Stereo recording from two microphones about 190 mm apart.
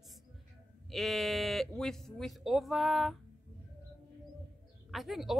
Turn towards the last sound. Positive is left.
turn(degrees=0)  # may be behind; listen again after turning